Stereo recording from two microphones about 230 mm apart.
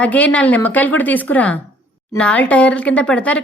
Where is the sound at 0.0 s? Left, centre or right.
Centre.